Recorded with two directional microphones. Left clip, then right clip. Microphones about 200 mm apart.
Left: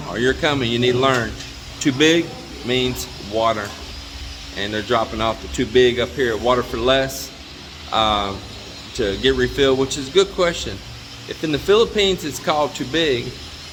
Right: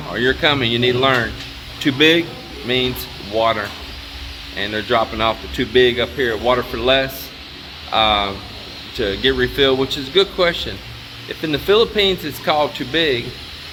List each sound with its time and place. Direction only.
0.1 s speech: 10° left (ahead or behind)